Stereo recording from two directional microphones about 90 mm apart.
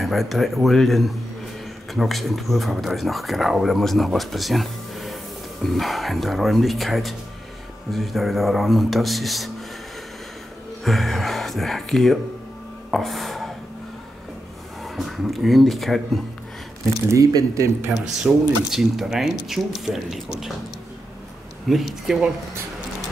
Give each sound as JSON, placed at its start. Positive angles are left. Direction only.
{"t": 0.0, "sound": "speech", "side_deg": 0}
{"t": 10.8, "sound": "speech", "side_deg": 0}
{"t": 12.9, "sound": "a sound", "side_deg": 0}
{"t": 14.8, "sound": "speech", "side_deg": 0}
{"t": 17.1, "sound": "speech", "side_deg": -40}
{"t": 18.3, "sound": "speech", "side_deg": -15}
{"t": 18.7, "sound": "speech", "side_deg": -5}
{"t": 21.6, "sound": "speech", "side_deg": 0}